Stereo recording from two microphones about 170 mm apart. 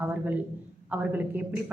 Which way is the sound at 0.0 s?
10° right (ahead or behind).